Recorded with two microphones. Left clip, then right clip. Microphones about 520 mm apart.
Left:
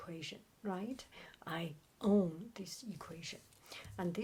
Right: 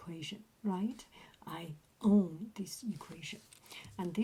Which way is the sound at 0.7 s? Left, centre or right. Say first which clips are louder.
Right 3 dB; left.